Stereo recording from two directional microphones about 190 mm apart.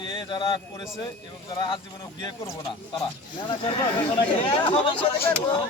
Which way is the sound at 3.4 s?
25° left (ahead or behind).